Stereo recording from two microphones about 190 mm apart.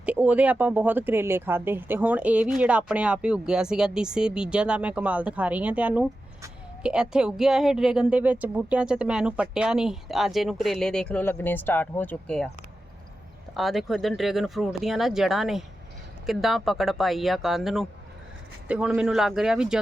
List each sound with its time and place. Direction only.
0.0 s speech: 5° right (ahead or behind)
13.5 s speech: centre (ahead or behind)